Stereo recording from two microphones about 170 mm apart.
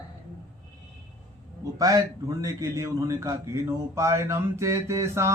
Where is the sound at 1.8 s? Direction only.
20° right (ahead or behind).